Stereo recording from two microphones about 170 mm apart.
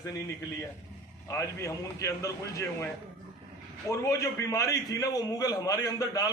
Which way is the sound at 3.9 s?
20° left (ahead or behind).